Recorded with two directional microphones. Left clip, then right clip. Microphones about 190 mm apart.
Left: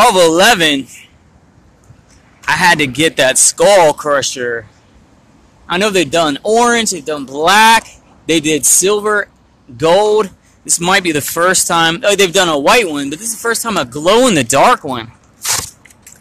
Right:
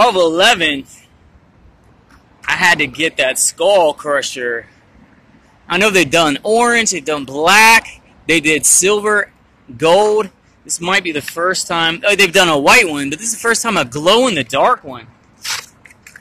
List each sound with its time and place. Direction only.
0.0 s a man's voice: 20° left (ahead or behind)
2.4 s a man's voice: 15° left (ahead or behind)
4.1 s speech: 10° left (ahead or behind)
5.7 s speech: centre (ahead or behind)
10.2 s speech: 20° left (ahead or behind); by 14.0 s centre (ahead or behind)
14.0 s speech: 15° left (ahead or behind)